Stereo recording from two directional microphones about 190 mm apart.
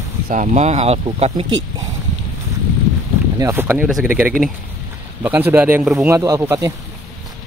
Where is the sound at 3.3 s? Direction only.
15° right (ahead or behind).